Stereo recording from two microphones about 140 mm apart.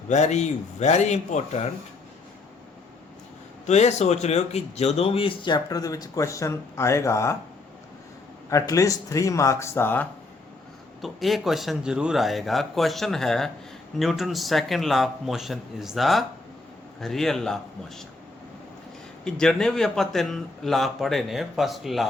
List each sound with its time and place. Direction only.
0.1 s speech: 55° left (ahead or behind)
3.7 s speech: 50° left (ahead or behind); by 7.3 s 20° left (ahead or behind)
8.4 s speech: 25° left (ahead or behind)
11.0 s speech: centre (ahead or behind)
19.2 s speech: 5° left (ahead or behind)